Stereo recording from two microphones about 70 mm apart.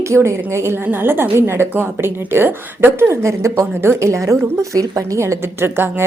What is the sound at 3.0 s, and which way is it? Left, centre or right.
A woman's voice, right.